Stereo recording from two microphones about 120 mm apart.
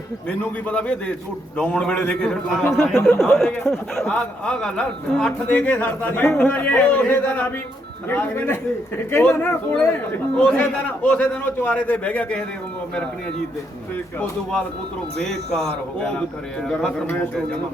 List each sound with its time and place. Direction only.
0.3 s a man's voice: 10° left (ahead or behind)
16.6 s speech: 10° left (ahead or behind)